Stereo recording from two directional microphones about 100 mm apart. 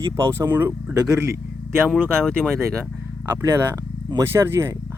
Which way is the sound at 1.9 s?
5° left (ahead or behind).